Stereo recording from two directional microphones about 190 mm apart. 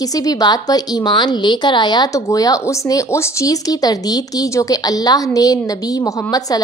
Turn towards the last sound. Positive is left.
turn(degrees=20)  # may be behind; listen again after turning